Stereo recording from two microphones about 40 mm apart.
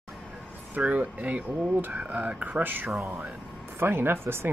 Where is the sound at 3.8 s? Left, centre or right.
Right.